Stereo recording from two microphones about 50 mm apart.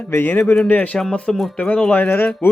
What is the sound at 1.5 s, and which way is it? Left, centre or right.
Speech, left.